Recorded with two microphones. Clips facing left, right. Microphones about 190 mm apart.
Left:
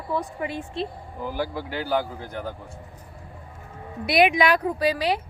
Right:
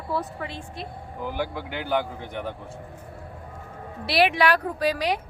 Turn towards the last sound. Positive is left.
turn(degrees=10)  # may be behind; listen again after turning